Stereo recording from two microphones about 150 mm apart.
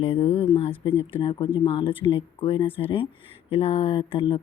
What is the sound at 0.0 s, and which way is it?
Speech, 40° left (ahead or behind).